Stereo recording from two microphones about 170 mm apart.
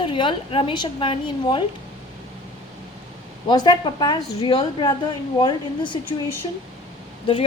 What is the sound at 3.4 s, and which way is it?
A woman's voice, 25° left (ahead or behind).